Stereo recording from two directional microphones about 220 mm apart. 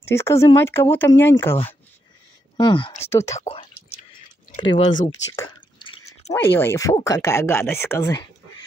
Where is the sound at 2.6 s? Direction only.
20° left (ahead or behind).